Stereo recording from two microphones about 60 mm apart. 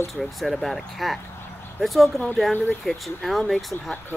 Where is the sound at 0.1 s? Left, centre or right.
Centre.